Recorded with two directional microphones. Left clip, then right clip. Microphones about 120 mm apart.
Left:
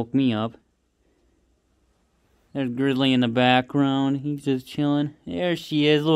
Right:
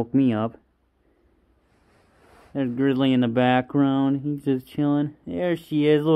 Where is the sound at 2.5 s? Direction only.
10° left (ahead or behind).